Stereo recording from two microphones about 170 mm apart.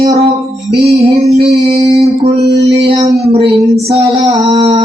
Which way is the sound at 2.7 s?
40° right (ahead or behind).